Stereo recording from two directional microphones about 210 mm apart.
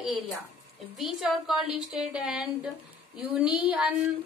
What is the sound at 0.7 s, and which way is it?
A woman's voice, centre (ahead or behind).